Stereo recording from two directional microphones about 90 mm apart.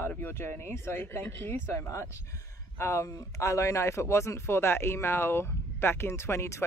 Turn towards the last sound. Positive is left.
turn(degrees=30)  # may be behind; listen again after turning